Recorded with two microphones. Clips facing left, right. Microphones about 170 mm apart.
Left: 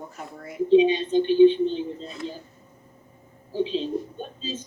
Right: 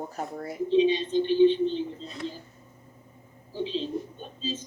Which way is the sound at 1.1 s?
55° left (ahead or behind).